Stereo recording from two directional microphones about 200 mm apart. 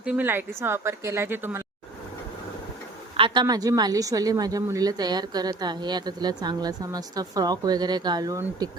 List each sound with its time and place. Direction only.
0.0 s a woman's voice: 5° right (ahead or behind)
3.2 s a woman's voice: 25° right (ahead or behind)